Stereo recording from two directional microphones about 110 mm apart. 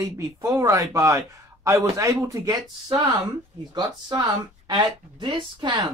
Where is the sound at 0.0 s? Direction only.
30° right (ahead or behind).